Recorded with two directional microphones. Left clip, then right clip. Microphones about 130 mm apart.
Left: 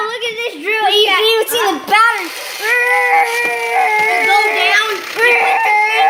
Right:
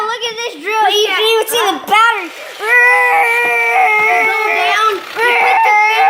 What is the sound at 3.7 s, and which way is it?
Dog, 35° right (ahead or behind).